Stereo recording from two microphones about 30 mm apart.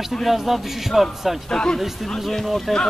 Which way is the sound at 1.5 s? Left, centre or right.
Centre.